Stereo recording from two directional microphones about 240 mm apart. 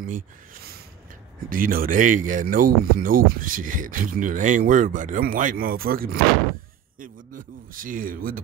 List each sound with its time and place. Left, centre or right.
1.5 s speech: right